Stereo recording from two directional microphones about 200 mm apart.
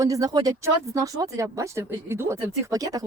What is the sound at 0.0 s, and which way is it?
Speech, 15° right (ahead or behind).